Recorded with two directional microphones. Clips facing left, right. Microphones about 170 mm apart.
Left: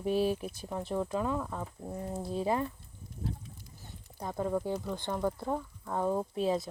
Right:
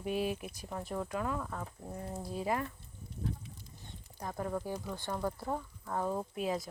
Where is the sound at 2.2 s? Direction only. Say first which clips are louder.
Left 4 dB; 25° left (ahead or behind).